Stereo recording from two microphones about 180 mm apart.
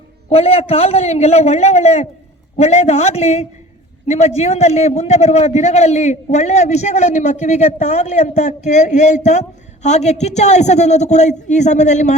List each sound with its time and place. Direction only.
0.3 s a man's voice: 35° left (ahead or behind)